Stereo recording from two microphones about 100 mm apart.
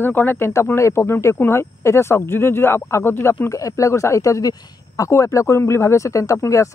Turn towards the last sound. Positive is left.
turn(degrees=30)  # may be behind; listen again after turning